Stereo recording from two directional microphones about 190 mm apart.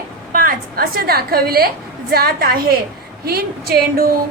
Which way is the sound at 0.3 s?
50° right (ahead or behind).